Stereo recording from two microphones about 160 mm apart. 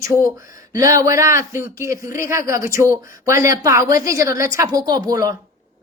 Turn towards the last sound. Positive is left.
turn(degrees=-20)  # may be behind; listen again after turning